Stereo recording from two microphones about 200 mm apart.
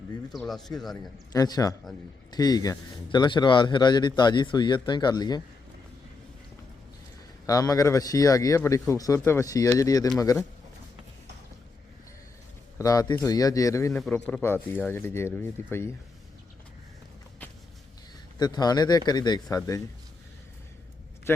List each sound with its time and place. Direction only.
0.3 s speech: centre (ahead or behind)
1.3 s speech: 20° left (ahead or behind)
7.4 s speech: 15° left (ahead or behind)
12.8 s speech: 20° left (ahead or behind)
18.3 s speech: 20° left (ahead or behind)